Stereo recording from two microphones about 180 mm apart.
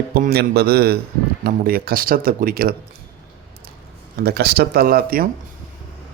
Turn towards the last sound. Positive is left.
turn(degrees=-55)  # may be behind; listen again after turning